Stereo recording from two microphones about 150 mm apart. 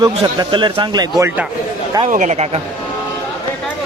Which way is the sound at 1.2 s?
15° right (ahead or behind).